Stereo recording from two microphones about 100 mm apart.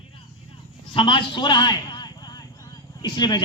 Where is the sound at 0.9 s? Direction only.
60° left (ahead or behind).